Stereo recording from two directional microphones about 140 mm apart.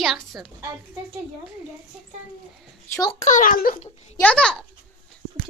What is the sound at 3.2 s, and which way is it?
Speech, 65° left (ahead or behind).